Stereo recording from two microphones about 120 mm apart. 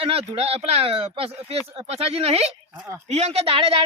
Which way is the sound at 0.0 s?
55° right (ahead or behind).